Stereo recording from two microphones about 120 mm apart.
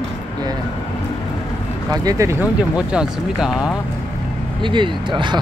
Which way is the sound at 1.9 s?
30° right (ahead or behind).